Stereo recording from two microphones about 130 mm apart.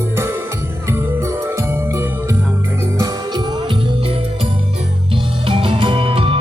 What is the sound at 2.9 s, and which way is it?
Music, 25° right (ahead or behind).